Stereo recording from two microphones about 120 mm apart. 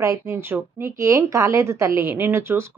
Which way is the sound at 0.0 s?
25° right (ahead or behind).